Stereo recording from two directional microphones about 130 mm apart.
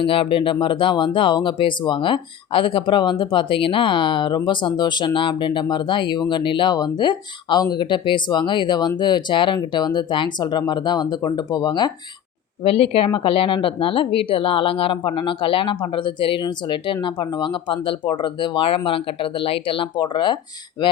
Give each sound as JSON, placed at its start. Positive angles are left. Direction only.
{"t": 0.0, "sound": "speech", "side_deg": 45}
{"t": 12.6, "sound": "speech", "side_deg": 50}